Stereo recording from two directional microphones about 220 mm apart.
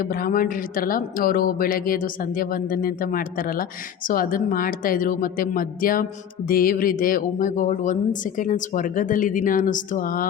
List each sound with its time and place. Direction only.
0.0 s speech: 40° left (ahead or behind)